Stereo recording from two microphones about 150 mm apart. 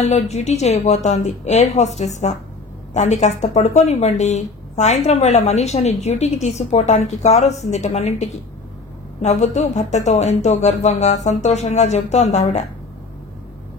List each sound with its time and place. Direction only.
0.0 s speech: 50° left (ahead or behind)